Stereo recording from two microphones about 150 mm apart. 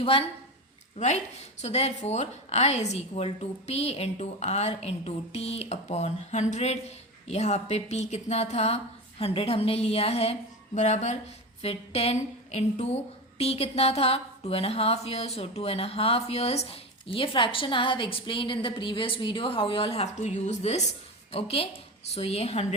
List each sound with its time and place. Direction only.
0.0 s a woman's voice: 40° left (ahead or behind)
1.6 s a woman's voice: 45° left (ahead or behind)